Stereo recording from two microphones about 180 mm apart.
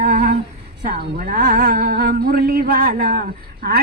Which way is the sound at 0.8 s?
50° right (ahead or behind).